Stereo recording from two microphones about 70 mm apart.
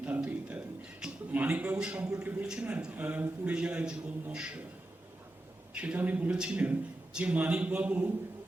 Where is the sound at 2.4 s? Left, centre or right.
Centre.